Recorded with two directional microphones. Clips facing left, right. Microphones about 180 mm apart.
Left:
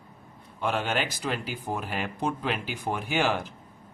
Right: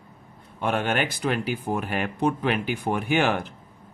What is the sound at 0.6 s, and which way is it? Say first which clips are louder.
Speech: right 3 dB; 55° right (ahead or behind).